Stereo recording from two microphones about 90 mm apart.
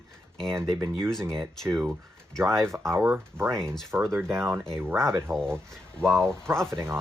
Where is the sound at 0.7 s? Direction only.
30° right (ahead or behind).